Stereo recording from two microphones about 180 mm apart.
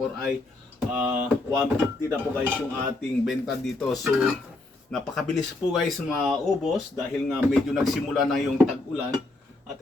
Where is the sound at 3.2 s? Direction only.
Centre (ahead or behind).